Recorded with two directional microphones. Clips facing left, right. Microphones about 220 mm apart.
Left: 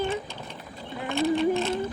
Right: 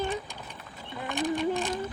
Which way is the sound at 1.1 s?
15° right (ahead or behind).